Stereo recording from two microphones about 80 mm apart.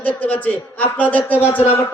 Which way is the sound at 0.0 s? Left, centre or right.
Centre.